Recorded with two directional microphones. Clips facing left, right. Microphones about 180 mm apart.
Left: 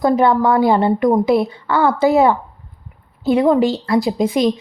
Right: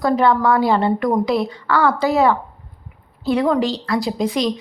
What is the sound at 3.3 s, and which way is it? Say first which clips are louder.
A woman's voice: left 4 dB; 25° left (ahead or behind).